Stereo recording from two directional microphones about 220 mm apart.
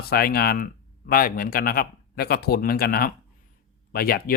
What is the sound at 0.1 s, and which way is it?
Speech, 45° left (ahead or behind).